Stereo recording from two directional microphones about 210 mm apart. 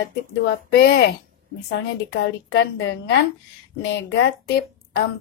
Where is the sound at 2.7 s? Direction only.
55° left (ahead or behind).